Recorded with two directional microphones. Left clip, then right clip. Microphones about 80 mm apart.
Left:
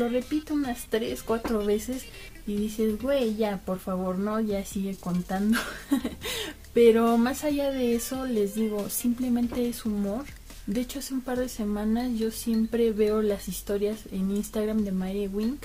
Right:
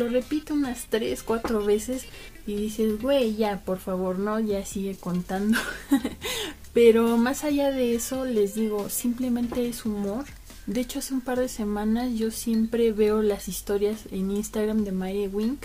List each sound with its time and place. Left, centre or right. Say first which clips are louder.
0.0 s a woman's voice: right 2 dB; right
2.6 s a woman's voice: right 2 dB; right
8.5 s speech: right 2 dB; centre
9.2 s a woman's voice: right 1 dB; right